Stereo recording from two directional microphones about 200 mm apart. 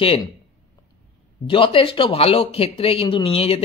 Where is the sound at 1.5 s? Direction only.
25° left (ahead or behind).